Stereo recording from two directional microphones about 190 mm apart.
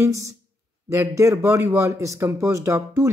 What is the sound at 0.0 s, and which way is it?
Speech, 15° right (ahead or behind).